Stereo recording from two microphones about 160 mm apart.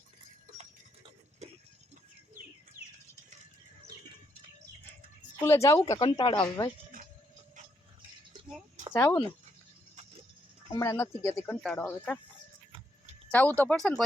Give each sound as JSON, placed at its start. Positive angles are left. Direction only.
{"t": 1.4, "sound": "a sound", "side_deg": -40}
{"t": 5.4, "sound": "speech", "side_deg": 20}
{"t": 6.9, "sound": "a sound", "side_deg": -60}
{"t": 8.9, "sound": "speech", "side_deg": 15}
{"t": 10.7, "sound": "speech", "side_deg": 20}
{"t": 13.3, "sound": "speech", "side_deg": 10}